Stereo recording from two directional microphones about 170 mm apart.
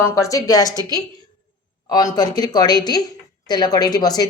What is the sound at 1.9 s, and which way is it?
A woman's voice, 25° left (ahead or behind).